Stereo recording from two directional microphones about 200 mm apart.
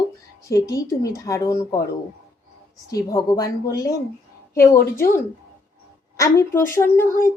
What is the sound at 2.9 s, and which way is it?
Speech, 20° left (ahead or behind).